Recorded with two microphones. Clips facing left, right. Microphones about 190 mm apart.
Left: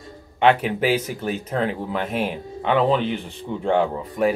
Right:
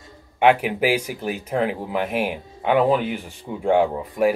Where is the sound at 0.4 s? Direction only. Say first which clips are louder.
Right 1 dB; 10° right (ahead or behind).